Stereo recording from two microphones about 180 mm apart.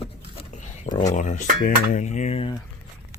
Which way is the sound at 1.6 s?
45° left (ahead or behind).